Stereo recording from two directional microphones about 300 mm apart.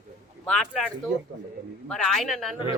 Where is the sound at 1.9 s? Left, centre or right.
Centre.